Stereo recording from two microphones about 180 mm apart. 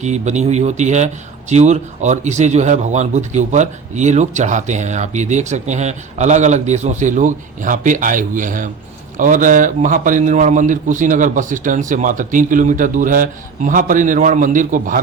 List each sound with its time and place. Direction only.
0.0 s a man's voice: 40° right (ahead or behind)